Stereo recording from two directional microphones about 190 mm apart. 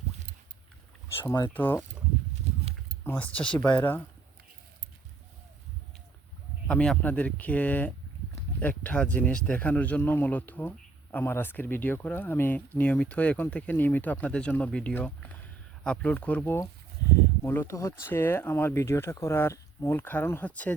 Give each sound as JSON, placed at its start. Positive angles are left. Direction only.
{"t": 1.2, "sound": "speech", "side_deg": 20}
{"t": 1.5, "sound": "speech", "side_deg": 10}
{"t": 3.0, "sound": "a sound", "side_deg": 10}
{"t": 3.3, "sound": "speech", "side_deg": 5}
{"t": 6.7, "sound": "speech", "side_deg": 5}